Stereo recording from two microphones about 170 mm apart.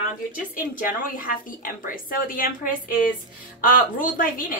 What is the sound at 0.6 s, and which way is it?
A woman's voice, 55° left (ahead or behind).